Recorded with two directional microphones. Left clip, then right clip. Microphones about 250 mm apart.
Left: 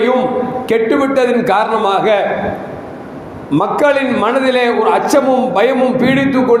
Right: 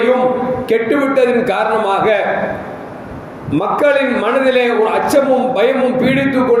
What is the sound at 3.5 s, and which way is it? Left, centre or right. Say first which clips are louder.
Speech: left 1 dB; centre.